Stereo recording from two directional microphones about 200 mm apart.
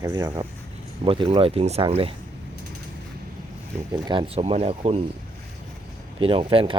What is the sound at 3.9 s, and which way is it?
Speech, 25° right (ahead or behind).